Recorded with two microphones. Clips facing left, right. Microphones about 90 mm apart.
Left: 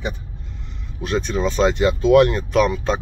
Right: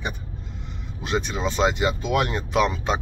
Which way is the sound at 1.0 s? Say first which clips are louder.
Left 4 dB; 10° right (ahead or behind).